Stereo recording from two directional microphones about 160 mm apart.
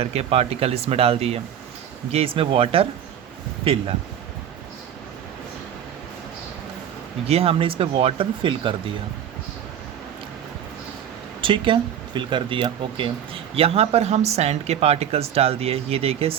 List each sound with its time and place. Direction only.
0.0 s speech: 40° right (ahead or behind)
7.3 s speech: 35° right (ahead or behind)
11.3 s speech: 30° right (ahead or behind)